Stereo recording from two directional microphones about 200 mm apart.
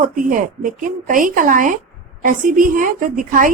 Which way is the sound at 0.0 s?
45° right (ahead or behind).